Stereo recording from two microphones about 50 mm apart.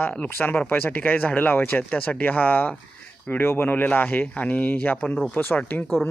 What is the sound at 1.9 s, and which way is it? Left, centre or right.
Speech, left.